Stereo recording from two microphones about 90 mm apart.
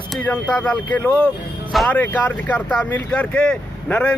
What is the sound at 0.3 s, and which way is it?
Speech, 10° left (ahead or behind).